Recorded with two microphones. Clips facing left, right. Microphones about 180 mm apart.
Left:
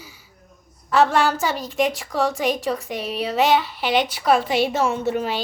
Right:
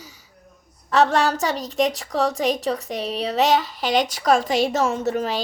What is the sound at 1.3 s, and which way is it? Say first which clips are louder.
A woman's voice: even; 35° right (ahead or behind).